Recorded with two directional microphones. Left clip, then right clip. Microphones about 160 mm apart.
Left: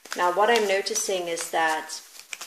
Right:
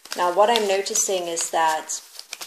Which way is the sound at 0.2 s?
40° right (ahead or behind).